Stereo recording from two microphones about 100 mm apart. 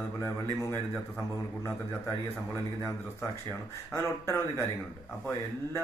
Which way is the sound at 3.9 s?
25° left (ahead or behind).